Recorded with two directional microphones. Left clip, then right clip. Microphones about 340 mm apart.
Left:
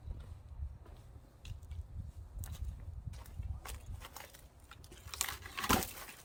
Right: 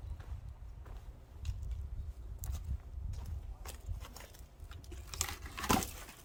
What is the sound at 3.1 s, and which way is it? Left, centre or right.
Walk, centre.